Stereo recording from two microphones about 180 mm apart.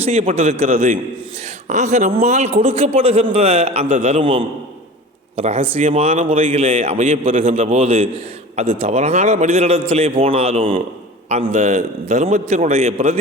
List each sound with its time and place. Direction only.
0.0 s a man's voice: 35° right (ahead or behind)
0.3 s a man's voice: 45° right (ahead or behind)
0.7 s a man's voice: 35° right (ahead or behind)